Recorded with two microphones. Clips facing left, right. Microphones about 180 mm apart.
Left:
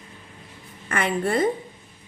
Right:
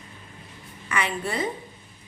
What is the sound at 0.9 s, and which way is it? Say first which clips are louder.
Speech: left 5 dB; 50° left (ahead or behind).